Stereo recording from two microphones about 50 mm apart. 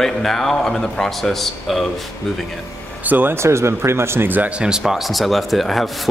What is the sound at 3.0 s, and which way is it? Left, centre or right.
Speech, right.